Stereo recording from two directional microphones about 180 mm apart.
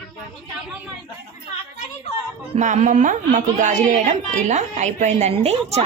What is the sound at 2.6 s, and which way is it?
A woman's voice, 45° right (ahead or behind).